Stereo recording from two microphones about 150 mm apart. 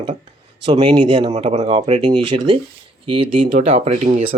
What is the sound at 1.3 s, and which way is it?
Speech, 45° right (ahead or behind).